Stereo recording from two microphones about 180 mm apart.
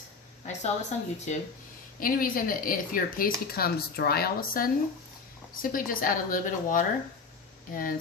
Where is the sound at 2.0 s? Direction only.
50° left (ahead or behind).